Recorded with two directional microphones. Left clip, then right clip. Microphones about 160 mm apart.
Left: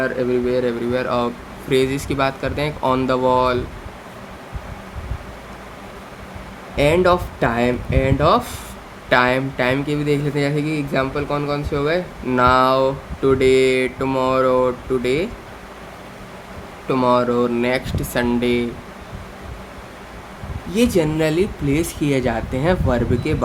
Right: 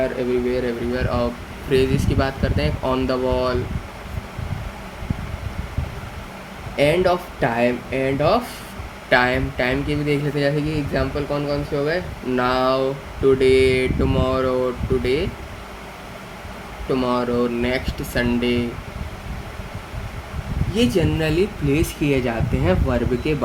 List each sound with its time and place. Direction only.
0.5 s speech: 45° left (ahead or behind)
6.7 s speech: 55° left (ahead or behind)
16.9 s speech: 50° left (ahead or behind)
20.7 s speech: 50° left (ahead or behind); by 23.3 s 25° left (ahead or behind)